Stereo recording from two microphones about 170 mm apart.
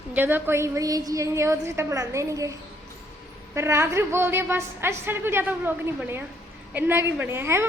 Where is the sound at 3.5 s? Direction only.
15° right (ahead or behind).